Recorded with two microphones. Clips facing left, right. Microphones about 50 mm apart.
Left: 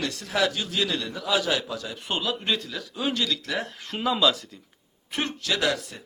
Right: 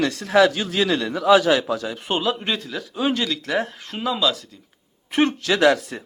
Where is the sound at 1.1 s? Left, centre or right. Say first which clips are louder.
Right 13 dB; right.